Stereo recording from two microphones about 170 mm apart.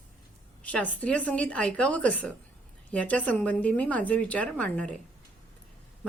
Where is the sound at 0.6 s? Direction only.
10° left (ahead or behind).